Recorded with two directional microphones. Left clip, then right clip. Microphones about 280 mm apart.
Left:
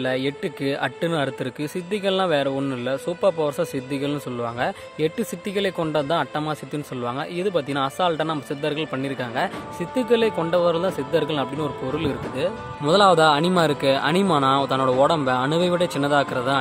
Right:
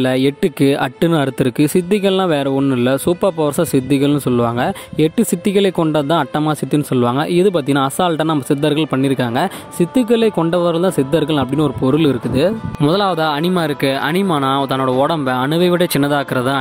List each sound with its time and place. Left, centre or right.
0.0 s speech: right